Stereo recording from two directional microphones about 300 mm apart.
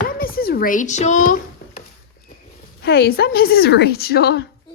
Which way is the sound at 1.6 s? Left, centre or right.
Left.